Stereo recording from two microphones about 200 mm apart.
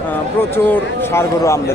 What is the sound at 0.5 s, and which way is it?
Speech, 10° left (ahead or behind).